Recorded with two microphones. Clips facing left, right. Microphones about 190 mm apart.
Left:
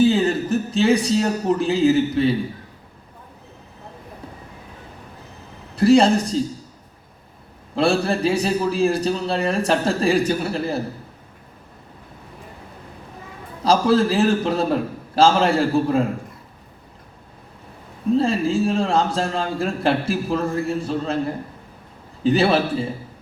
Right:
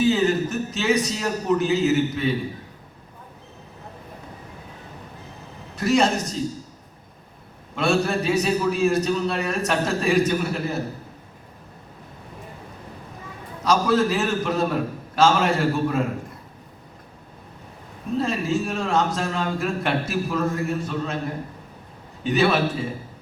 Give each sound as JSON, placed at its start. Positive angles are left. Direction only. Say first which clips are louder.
{"t": 0.0, "sound": "a man's voice", "louder": "left 2 dB", "side_deg": 30}
{"t": 5.7, "sound": "a man's voice", "louder": "left 6 dB", "side_deg": 30}
{"t": 7.8, "sound": "a man's voice", "louder": "left 3 dB", "side_deg": 30}
{"t": 13.7, "sound": "a man's voice", "louder": "left 3 dB", "side_deg": 30}
{"t": 18.2, "sound": "a man's voice", "louder": "left 2 dB", "side_deg": 30}
{"t": 22.2, "sound": "a man's voice", "louder": "left 3 dB", "side_deg": 30}